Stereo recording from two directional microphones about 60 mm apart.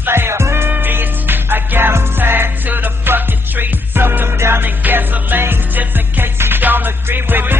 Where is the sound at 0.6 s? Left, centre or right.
Right.